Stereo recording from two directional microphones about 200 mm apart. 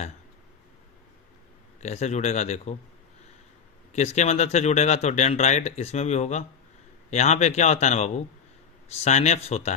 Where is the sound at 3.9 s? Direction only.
35° left (ahead or behind).